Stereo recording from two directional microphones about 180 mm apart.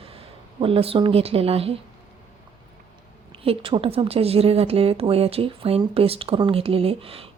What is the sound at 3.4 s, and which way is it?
A woman's voice, 30° right (ahead or behind).